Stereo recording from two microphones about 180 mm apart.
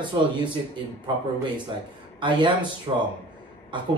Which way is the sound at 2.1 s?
25° right (ahead or behind).